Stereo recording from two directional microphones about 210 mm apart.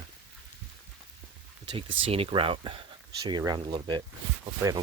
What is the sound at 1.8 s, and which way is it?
Speech, 25° right (ahead or behind).